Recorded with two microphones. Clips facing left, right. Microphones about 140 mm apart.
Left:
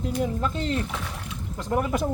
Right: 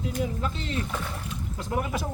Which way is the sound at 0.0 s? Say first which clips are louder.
Left 3 dB; 45° left (ahead or behind).